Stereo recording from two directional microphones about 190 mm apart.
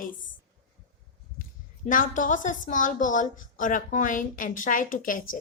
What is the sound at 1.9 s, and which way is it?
A woman's voice, 45° left (ahead or behind).